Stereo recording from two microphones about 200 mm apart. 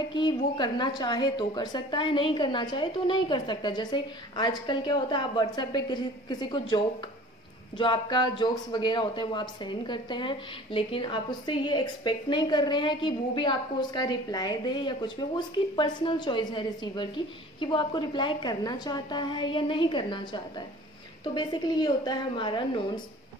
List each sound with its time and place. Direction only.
0.1 s speech: 20° left (ahead or behind)